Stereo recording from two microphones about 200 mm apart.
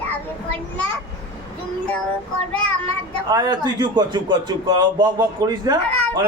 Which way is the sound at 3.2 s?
20° right (ahead or behind).